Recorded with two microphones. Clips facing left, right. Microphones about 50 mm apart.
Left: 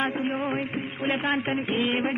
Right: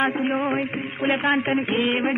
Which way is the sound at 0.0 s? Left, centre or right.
Right.